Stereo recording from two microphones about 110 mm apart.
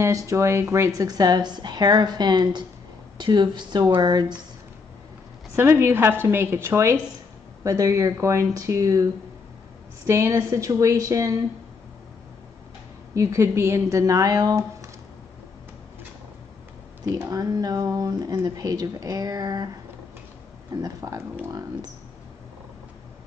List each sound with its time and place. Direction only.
0.0 s a woman's voice: 30° right (ahead or behind)
5.6 s speech: 20° right (ahead or behind)
13.1 s speech: 30° right (ahead or behind)
17.3 s a woman's voice: 35° right (ahead or behind)
20.7 s a woman's voice: 35° right (ahead or behind)